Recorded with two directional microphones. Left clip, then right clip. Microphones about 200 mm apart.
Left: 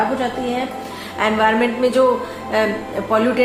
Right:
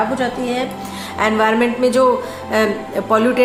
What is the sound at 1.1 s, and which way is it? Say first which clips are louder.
A woman's voice: right 1 dB; 35° right (ahead or behind).